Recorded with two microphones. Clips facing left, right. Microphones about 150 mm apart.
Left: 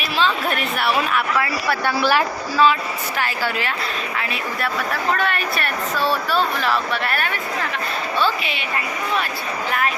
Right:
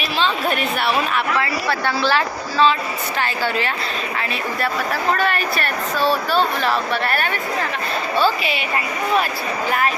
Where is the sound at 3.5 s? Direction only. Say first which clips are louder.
Right 2 dB; 5° left (ahead or behind).